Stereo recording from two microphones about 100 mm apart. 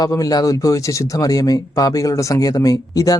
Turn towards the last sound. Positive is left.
turn(degrees=35)  # may be behind; listen again after turning